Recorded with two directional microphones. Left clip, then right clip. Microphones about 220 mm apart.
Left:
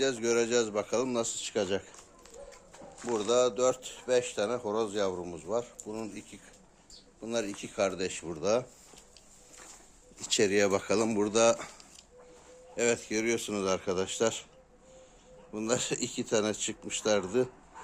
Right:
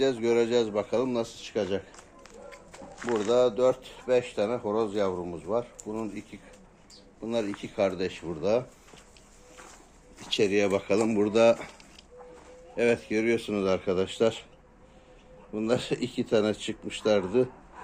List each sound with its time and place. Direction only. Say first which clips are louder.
0.0 s speech: right 4 dB; 5° left (ahead or behind); by 1.9 s 25° left (ahead or behind)
3.0 s speech: right 3 dB; 10° left (ahead or behind)
10.2 s speech: right 1 dB; 30° left (ahead or behind); by 11.7 s 10° left (ahead or behind)
12.7 s speech: right 4 dB; 5° left (ahead or behind)
15.5 s speech: right 3 dB; 5° left (ahead or behind)